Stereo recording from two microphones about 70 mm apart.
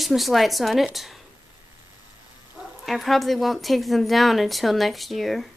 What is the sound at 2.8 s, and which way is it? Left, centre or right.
Speech, centre.